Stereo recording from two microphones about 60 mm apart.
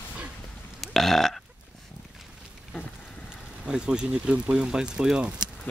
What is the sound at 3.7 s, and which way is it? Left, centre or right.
Speech, centre.